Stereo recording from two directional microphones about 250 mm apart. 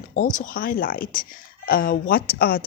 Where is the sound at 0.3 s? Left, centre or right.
Left.